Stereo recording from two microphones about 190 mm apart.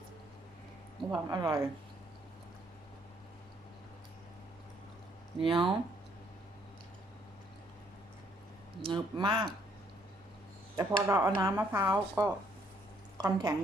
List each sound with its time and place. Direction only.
1.1 s speech: 20° right (ahead or behind)
5.4 s speech: 25° right (ahead or behind)
8.8 s speech: 25° right (ahead or behind)
10.8 s a woman's voice: 15° right (ahead or behind)